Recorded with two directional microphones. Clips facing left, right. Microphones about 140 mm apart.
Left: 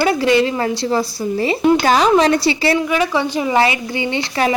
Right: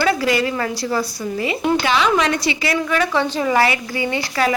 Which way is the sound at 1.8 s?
40° left (ahead or behind).